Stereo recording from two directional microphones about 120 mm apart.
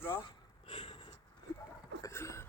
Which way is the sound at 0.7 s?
50° left (ahead or behind).